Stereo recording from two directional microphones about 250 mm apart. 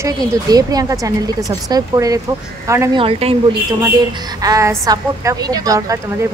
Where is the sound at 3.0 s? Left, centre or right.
Right.